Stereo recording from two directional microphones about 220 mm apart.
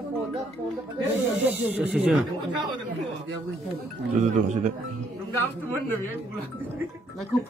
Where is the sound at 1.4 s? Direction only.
5° right (ahead or behind).